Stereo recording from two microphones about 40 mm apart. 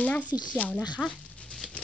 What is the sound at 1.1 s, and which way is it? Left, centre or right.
Dog, left.